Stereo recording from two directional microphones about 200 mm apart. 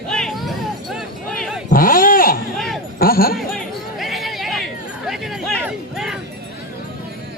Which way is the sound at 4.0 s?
Centre (ahead or behind).